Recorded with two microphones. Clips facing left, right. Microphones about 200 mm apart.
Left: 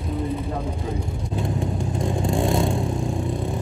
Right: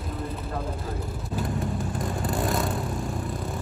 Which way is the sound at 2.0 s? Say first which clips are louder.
Left 6 dB; 25° left (ahead or behind).